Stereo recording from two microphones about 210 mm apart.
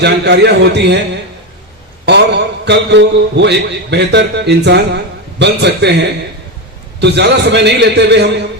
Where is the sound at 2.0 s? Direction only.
55° right (ahead or behind).